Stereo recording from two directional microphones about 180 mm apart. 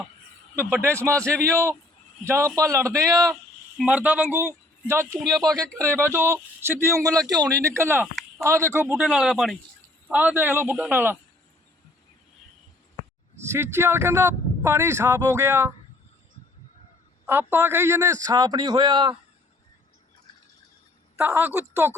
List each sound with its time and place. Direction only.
1.5 s speech: 15° right (ahead or behind)
3.8 s speech: 5° right (ahead or behind)
5.2 s speech: 5° left (ahead or behind)
5.7 s speech: 15° right (ahead or behind)
13.5 s speech: 15° right (ahead or behind)
17.2 s a man's voice: 10° right (ahead or behind)
21.2 s speech: 10° right (ahead or behind)